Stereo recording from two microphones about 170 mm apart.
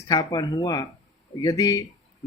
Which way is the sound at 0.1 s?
20° left (ahead or behind).